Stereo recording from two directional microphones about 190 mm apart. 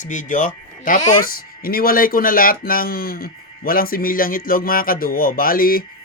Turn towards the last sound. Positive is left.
turn(degrees=50)  # may be behind; listen again after turning